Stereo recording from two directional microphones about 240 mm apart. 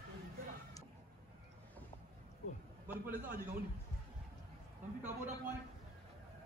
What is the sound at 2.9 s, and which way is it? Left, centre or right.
Speech, centre.